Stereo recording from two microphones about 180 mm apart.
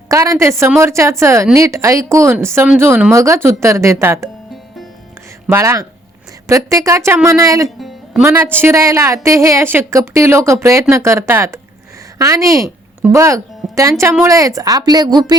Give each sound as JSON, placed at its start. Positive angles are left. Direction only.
{"t": 0.1, "sound": "a woman's voice", "side_deg": -15}
{"t": 5.5, "sound": "a woman's voice", "side_deg": -15}
{"t": 7.8, "sound": "music", "side_deg": 0}
{"t": 8.2, "sound": "a woman's voice", "side_deg": -15}